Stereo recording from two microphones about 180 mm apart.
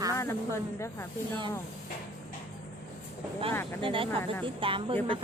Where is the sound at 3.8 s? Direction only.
30° right (ahead or behind).